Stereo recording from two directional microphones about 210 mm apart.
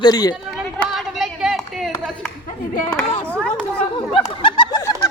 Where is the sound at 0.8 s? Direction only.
Centre (ahead or behind).